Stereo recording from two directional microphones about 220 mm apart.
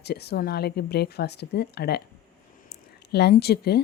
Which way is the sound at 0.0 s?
50° left (ahead or behind).